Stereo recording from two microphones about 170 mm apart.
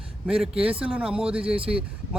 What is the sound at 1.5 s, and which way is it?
Speech, 35° right (ahead or behind).